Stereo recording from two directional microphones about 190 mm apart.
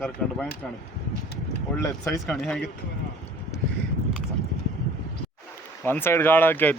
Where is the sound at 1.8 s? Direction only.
15° left (ahead or behind).